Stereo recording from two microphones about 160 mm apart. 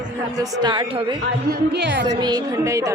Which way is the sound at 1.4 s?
90° right.